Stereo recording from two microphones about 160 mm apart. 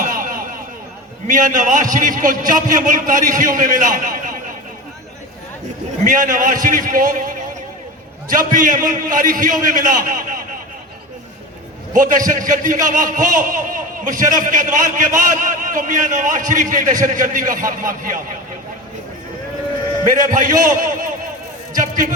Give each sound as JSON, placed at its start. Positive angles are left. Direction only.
{"t": 0.0, "sound": "a sound", "side_deg": -55}
{"t": 1.3, "sound": "a man's voice", "side_deg": -55}
{"t": 6.1, "sound": "a man's voice", "side_deg": -55}
{"t": 8.3, "sound": "a man's voice", "side_deg": -55}
{"t": 11.9, "sound": "a man's voice", "side_deg": -55}
{"t": 20.1, "sound": "a man's voice", "side_deg": -55}
{"t": 21.8, "sound": "a sound", "side_deg": -55}